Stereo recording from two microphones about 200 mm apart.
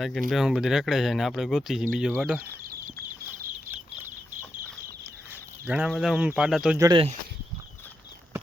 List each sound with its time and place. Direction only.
0.0 s speech: centre (ahead or behind)
5.6 s speech: 5° right (ahead or behind)
6.7 s speech: 20° right (ahead or behind)